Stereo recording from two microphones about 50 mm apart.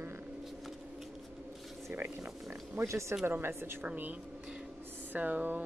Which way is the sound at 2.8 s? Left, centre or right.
Right.